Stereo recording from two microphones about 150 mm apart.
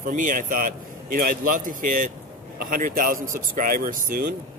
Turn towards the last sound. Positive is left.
turn(degrees=-70)  # may be behind; listen again after turning